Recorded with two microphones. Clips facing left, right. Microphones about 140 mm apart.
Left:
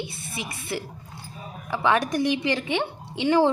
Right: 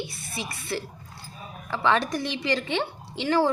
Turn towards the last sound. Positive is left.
turn(degrees=15)  # may be behind; listen again after turning